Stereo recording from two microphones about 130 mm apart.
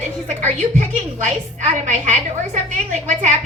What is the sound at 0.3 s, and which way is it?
Music, 60° right (ahead or behind).